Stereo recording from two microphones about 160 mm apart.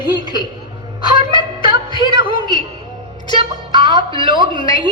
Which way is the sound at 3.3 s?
25° right (ahead or behind).